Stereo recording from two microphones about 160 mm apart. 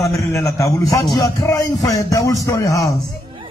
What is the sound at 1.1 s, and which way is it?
Speech, 20° left (ahead or behind).